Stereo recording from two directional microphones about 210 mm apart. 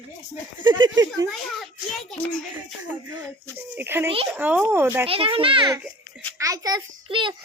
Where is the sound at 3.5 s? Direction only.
10° right (ahead or behind).